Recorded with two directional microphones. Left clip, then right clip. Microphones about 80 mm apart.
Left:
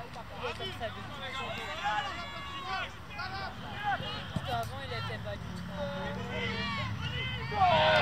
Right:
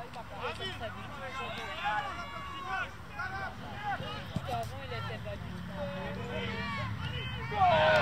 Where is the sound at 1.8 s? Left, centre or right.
Left.